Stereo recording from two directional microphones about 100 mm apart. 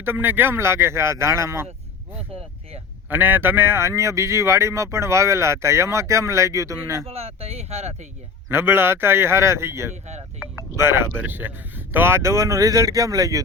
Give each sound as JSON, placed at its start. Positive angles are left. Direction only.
{"t": 0.0, "sound": "speech", "side_deg": -20}
{"t": 3.1, "sound": "speech", "side_deg": -20}
{"t": 7.1, "sound": "speech", "side_deg": -90}
{"t": 8.4, "sound": "speech", "side_deg": -25}